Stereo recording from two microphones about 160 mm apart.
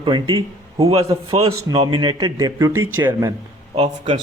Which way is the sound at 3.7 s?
45° right (ahead or behind).